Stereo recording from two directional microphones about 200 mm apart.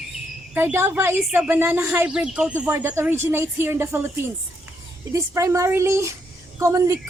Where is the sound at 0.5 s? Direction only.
10° right (ahead or behind).